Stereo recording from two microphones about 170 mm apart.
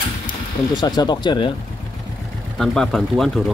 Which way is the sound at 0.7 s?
25° left (ahead or behind).